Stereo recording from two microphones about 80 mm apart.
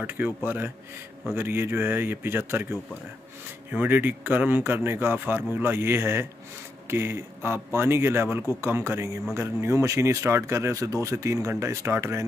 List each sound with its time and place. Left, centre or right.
0.2 s speech: right